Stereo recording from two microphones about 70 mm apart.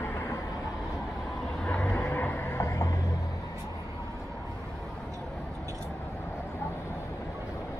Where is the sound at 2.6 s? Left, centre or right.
Left.